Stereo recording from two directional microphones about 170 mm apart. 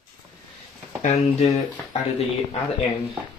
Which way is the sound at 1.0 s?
40° left (ahead or behind).